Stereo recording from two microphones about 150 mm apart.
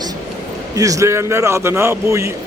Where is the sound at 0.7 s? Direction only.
20° right (ahead or behind).